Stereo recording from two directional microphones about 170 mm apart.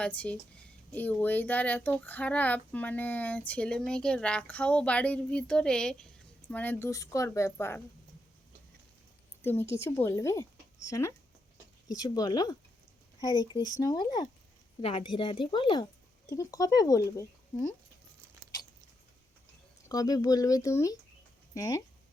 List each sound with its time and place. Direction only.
0.0 s speech: 10° left (ahead or behind)
9.4 s speech: 15° left (ahead or behind)
19.9 s speech: 20° left (ahead or behind)